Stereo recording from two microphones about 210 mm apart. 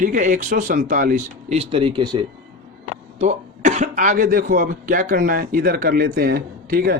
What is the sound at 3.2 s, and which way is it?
A man's voice, 35° right (ahead or behind).